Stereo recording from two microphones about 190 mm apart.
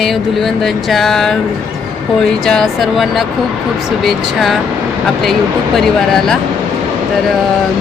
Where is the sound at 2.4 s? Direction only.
Centre (ahead or behind).